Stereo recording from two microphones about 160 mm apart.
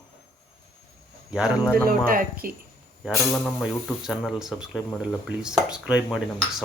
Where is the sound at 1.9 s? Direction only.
65° right (ahead or behind).